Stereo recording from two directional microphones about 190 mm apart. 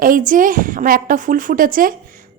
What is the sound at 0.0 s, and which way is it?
A woman's voice, 45° right (ahead or behind).